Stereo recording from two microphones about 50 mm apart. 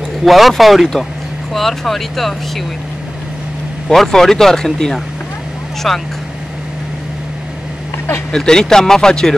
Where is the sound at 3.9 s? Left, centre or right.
Centre.